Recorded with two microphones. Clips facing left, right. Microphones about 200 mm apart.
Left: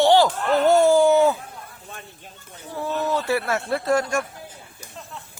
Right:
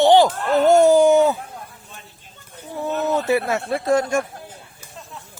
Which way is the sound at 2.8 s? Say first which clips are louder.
Right 3 dB; 20° right (ahead or behind).